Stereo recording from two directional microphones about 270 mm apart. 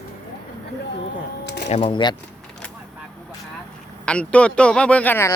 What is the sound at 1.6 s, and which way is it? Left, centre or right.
Speech, left.